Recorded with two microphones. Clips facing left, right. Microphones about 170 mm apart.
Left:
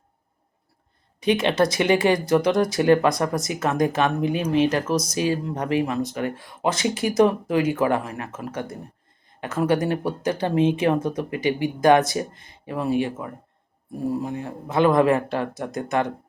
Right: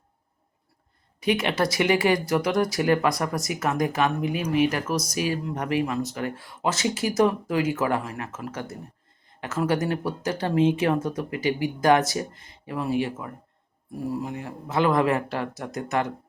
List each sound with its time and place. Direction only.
1.2 s speech: 20° left (ahead or behind)